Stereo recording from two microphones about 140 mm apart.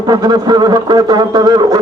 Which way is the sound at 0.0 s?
30° right (ahead or behind).